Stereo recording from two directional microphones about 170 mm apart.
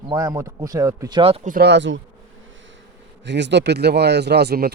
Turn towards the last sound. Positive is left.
turn(degrees=-70)  # may be behind; listen again after turning